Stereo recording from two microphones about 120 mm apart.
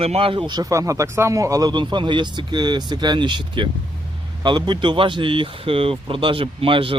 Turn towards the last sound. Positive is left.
turn(degrees=-45)  # may be behind; listen again after turning